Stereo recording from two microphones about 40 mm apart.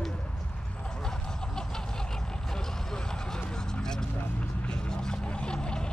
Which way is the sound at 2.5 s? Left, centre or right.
Centre.